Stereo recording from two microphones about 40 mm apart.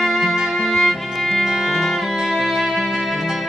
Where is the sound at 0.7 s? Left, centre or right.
Centre.